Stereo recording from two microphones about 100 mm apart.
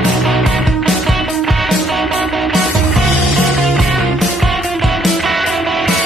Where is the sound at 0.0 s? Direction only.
Centre (ahead or behind).